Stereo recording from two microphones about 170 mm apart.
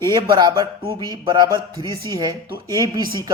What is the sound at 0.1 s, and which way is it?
Speech, 25° right (ahead or behind).